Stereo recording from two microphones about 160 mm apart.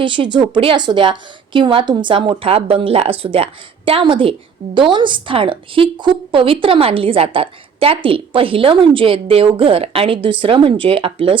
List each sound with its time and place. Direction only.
0.0 s a woman's voice: 30° right (ahead or behind)